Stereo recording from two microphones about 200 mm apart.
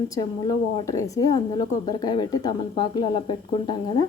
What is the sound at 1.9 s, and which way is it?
A woman's voice, 20° left (ahead or behind).